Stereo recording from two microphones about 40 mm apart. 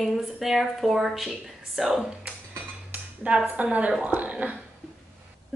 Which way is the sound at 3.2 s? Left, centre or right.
Right.